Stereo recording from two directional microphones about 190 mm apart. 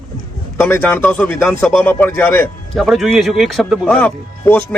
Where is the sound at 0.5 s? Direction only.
10° left (ahead or behind).